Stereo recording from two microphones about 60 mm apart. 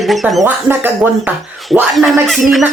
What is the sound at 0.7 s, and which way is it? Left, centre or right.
Speech, right.